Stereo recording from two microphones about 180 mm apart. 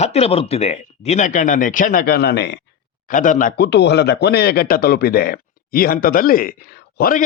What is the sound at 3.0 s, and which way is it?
Speech, 45° left (ahead or behind).